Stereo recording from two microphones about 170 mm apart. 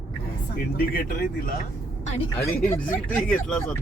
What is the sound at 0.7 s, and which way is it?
Speech, 60° left (ahead or behind).